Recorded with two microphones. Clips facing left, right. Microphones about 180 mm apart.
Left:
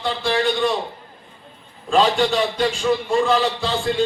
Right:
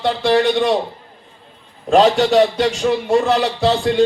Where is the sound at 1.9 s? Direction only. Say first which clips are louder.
Right 5 dB; 70° right (ahead or behind).